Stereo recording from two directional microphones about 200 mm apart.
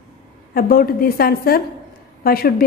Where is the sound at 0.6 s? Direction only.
50° left (ahead or behind).